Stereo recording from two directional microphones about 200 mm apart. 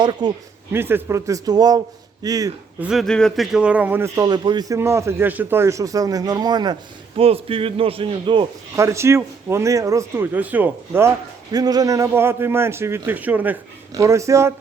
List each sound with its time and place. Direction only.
0.0 s a man's voice: 20° right (ahead or behind)
2.8 s a man's voice: centre (ahead or behind); by 8.4 s 25° right (ahead or behind)
8.7 s a man's voice: 15° right (ahead or behind)